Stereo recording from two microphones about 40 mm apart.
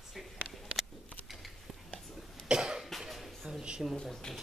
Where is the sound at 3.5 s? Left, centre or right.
Centre.